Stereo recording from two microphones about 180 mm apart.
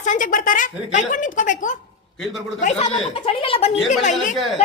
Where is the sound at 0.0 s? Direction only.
45° left (ahead or behind).